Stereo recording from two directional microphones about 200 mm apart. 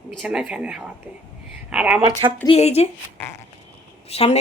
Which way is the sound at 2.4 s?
30° left (ahead or behind).